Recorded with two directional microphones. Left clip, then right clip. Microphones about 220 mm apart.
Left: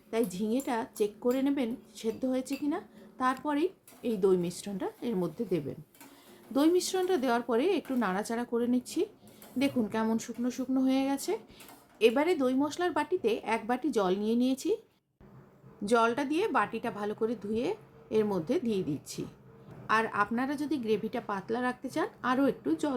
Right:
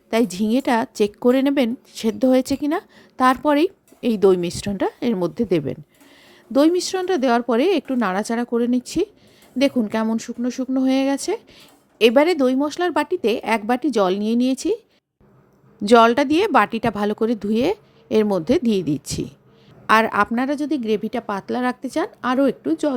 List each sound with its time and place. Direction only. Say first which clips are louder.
0.1 s a woman's voice: right 11 dB; 45° right (ahead or behind)
15.8 s a woman's voice: right 13 dB; 40° right (ahead or behind)